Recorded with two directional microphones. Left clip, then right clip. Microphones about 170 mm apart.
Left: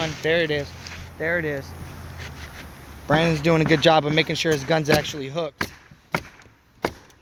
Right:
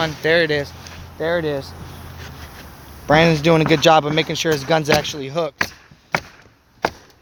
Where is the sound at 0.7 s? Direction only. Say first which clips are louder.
Even; 50° right (ahead or behind).